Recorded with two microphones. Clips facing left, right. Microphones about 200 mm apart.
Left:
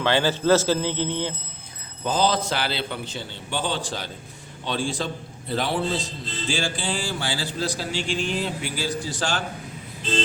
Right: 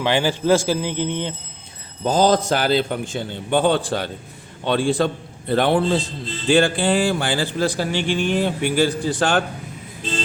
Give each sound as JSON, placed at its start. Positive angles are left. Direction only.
{"t": 0.0, "sound": "speech", "side_deg": -15}
{"t": 2.0, "sound": "a man's voice", "side_deg": -45}